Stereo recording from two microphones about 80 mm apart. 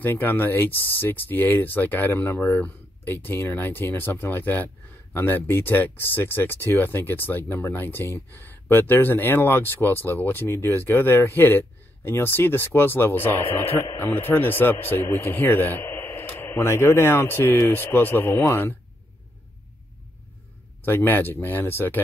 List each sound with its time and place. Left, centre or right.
0.0 s speech: left
20.8 s speech: left